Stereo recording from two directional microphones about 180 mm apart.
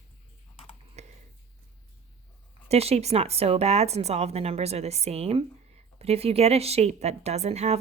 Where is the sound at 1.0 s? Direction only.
40° right (ahead or behind).